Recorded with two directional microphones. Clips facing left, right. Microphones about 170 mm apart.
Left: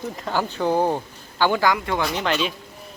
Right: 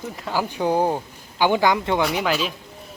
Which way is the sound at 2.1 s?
5° right (ahead or behind).